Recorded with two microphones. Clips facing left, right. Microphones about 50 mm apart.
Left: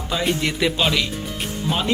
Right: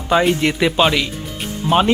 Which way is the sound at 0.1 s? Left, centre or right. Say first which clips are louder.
Right 7 dB; right.